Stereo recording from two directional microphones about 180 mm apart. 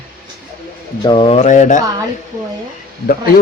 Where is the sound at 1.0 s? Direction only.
25° left (ahead or behind); by 1.8 s 45° left (ahead or behind).